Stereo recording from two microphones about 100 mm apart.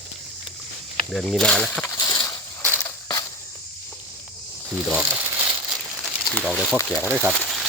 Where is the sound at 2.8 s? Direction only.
35° left (ahead or behind).